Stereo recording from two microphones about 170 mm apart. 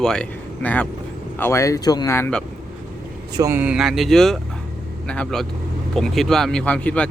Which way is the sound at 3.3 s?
20° right (ahead or behind).